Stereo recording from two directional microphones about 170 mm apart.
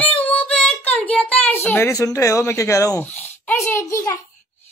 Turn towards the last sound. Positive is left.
turn(degrees=15)  # may be behind; listen again after turning